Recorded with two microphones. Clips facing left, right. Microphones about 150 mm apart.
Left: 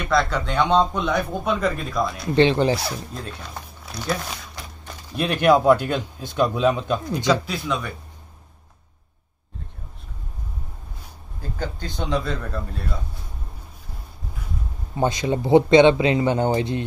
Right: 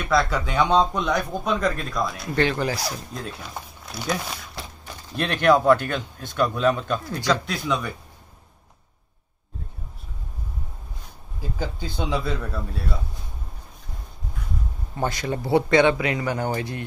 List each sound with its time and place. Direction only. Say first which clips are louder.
0.0 s speech: left 1 dB; centre (ahead or behind)
2.3 s speech: left 6 dB; 25° left (ahead or behind)
2.8 s speech: left 1 dB; centre (ahead or behind); by 7.3 s 20° left (ahead or behind)
7.4 s speech: right 1 dB; centre (ahead or behind)
11.4 s speech: even; 10° right (ahead or behind)
15.0 s speech: left 4 dB; 20° left (ahead or behind)